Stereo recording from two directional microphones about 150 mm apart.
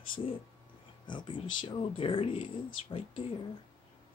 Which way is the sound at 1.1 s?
30° left (ahead or behind).